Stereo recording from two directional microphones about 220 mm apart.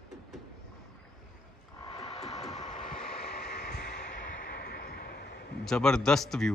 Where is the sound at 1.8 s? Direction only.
25° left (ahead or behind).